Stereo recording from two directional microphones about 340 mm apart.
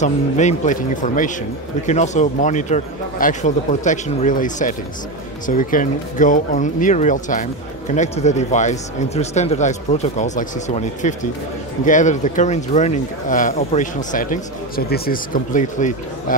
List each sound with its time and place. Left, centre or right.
0.0 s speech: left